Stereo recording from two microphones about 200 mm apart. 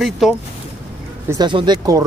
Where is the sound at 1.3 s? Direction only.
20° right (ahead or behind).